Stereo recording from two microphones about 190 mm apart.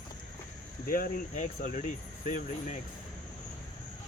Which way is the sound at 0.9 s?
45° left (ahead or behind).